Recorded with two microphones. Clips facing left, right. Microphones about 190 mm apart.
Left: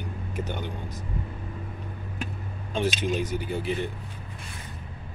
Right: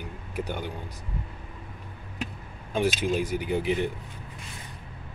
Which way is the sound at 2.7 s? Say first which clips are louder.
Right 1 dB; 10° right (ahead or behind).